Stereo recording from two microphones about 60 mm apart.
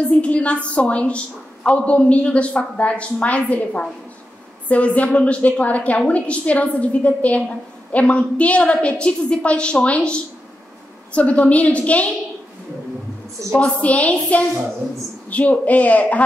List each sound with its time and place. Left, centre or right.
0.2 s a woman's voice: left
13.6 s a woman's voice: left